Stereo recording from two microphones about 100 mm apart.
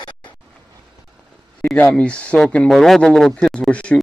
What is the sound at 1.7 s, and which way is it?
Speech, 10° left (ahead or behind).